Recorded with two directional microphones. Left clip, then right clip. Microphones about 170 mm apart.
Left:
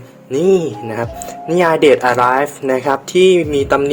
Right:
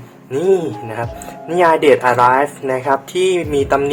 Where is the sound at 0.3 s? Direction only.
30° left (ahead or behind).